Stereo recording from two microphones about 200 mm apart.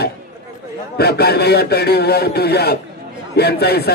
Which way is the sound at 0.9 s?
55° left (ahead or behind).